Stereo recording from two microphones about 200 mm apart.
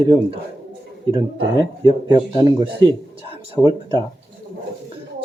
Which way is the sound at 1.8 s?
20° right (ahead or behind).